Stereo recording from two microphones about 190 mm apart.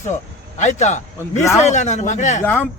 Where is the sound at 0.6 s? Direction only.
40° left (ahead or behind).